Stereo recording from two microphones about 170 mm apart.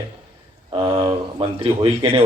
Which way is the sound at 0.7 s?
30° right (ahead or behind).